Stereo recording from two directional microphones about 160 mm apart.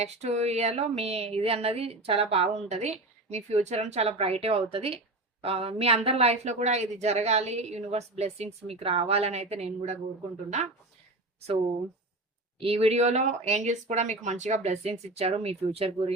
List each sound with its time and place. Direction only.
0.0 s speech: 45° right (ahead or behind)
12.5 s speech: 35° right (ahead or behind)